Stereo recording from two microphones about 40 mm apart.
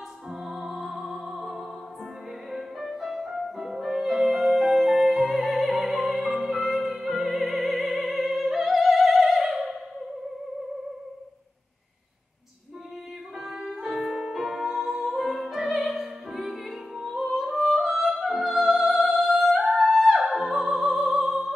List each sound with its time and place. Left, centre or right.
0.3 s music: centre
3.0 s music: centre
6.9 s opera: centre
9.3 s opera: centre
13.4 s music: centre